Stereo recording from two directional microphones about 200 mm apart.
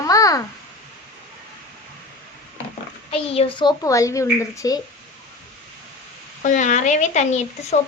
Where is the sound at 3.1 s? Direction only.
25° left (ahead or behind).